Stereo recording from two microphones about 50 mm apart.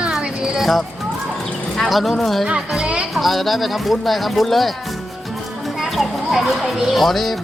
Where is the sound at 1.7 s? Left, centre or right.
Centre.